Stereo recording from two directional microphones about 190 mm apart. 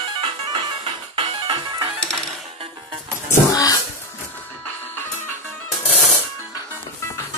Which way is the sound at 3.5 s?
20° left (ahead or behind).